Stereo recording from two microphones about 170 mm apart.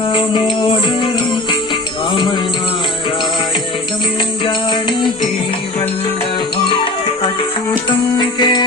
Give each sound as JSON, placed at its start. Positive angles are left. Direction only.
{"t": 0.1, "sound": "music", "side_deg": 30}
{"t": 4.4, "sound": "music", "side_deg": 30}
{"t": 7.7, "sound": "music", "side_deg": 25}